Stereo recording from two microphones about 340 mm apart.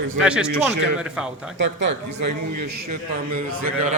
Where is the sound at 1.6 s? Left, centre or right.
Right.